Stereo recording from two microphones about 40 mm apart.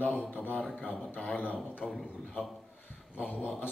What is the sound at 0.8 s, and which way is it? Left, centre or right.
Speech, left.